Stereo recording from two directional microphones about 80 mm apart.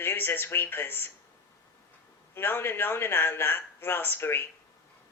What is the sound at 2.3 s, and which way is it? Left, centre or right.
A woman's voice, left.